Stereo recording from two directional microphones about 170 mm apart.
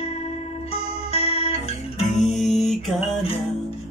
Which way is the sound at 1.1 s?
35° left (ahead or behind).